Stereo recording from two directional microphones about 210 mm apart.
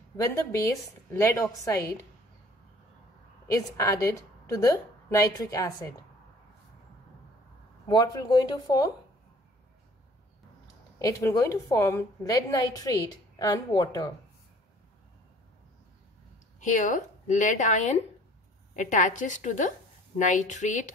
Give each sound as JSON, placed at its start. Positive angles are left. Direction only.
{"t": 0.2, "sound": "a woman's voice", "side_deg": 15}
{"t": 3.4, "sound": "a woman's voice", "side_deg": 15}
{"t": 7.9, "sound": "speech", "side_deg": 20}
{"t": 11.0, "sound": "a woman's voice", "side_deg": 15}
{"t": 16.5, "sound": "speech", "side_deg": 35}